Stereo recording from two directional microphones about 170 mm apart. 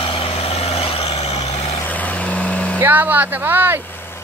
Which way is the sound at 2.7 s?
10° right (ahead or behind).